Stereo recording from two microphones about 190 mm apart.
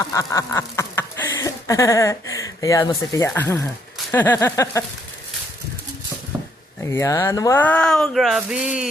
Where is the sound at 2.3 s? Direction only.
15° left (ahead or behind).